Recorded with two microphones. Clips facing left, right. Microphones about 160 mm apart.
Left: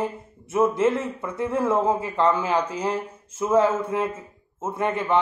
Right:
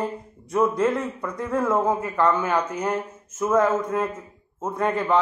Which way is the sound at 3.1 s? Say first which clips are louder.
Right 1 dB; 10° left (ahead or behind).